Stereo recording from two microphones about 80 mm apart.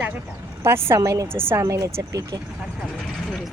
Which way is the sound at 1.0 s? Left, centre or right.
Right.